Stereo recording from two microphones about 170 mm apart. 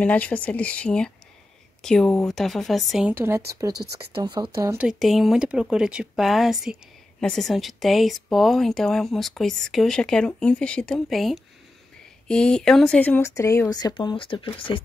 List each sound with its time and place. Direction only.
0.0 s speech: 10° left (ahead or behind); by 4.7 s 20° right (ahead or behind)
4.7 s speech: centre (ahead or behind); by 14.8 s 30° left (ahead or behind)